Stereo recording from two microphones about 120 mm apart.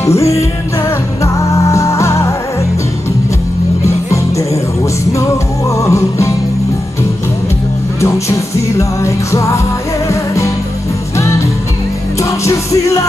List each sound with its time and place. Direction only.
0.0 s music: 25° left (ahead or behind)
3.8 s music: 25° left (ahead or behind)
5.7 s music: 25° left (ahead or behind)
8.0 s music: 25° left (ahead or behind)